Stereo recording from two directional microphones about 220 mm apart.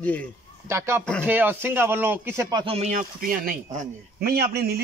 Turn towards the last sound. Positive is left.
turn(degrees=-45)  # may be behind; listen again after turning